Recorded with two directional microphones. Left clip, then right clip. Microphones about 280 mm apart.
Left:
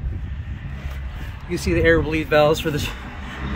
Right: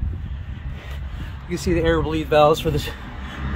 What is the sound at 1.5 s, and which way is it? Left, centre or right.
Speech, centre.